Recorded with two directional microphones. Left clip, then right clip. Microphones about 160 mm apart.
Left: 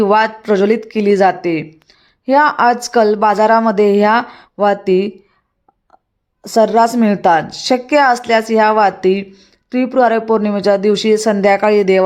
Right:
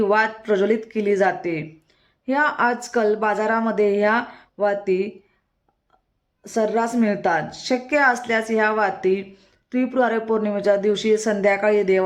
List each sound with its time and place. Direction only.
0.0 s speech: 40° left (ahead or behind)
6.4 s speech: 40° left (ahead or behind)
9.3 s speech: 25° left (ahead or behind)